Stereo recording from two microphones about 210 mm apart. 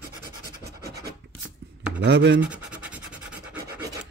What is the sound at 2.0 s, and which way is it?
Speech, 55° right (ahead or behind).